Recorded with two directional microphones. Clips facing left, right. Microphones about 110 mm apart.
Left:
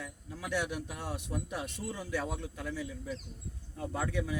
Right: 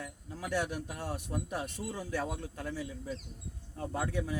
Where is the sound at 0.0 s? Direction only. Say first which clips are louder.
Right 1 dB; 40° right (ahead or behind).